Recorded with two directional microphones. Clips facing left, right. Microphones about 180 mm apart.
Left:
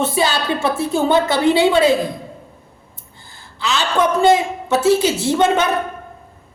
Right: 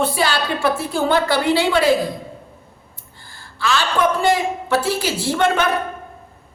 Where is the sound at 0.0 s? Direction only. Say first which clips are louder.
Left 1 dB; 20° left (ahead or behind).